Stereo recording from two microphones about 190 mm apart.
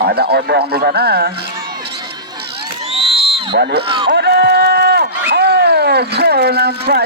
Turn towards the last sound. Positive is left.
turn(degrees=-55)  # may be behind; listen again after turning